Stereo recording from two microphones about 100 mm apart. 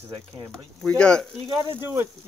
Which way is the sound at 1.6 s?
25° right (ahead or behind).